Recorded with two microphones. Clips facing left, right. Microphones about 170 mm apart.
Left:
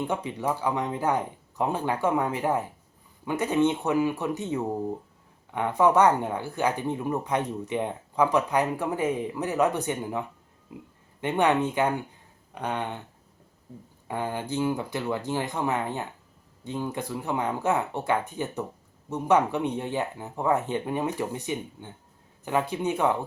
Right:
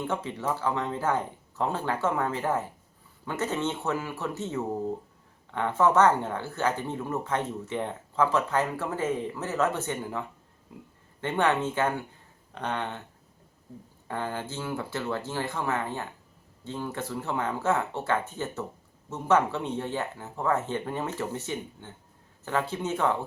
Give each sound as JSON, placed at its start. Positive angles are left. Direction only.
{"t": 0.1, "sound": "speech", "side_deg": 15}
{"t": 14.1, "sound": "speech", "side_deg": 15}